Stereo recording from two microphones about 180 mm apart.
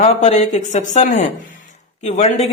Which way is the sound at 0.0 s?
40° left (ahead or behind).